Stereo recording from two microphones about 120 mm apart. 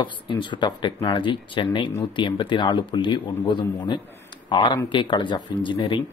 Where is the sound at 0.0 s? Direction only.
40° left (ahead or behind).